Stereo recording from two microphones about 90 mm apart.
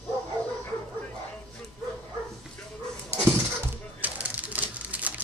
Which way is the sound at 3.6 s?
20° right (ahead or behind).